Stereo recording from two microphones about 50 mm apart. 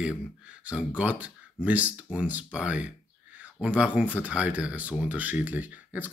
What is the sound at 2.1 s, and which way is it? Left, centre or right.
Speech, right.